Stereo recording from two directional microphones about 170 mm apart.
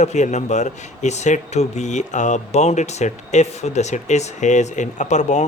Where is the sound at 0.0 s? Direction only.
45° left (ahead or behind).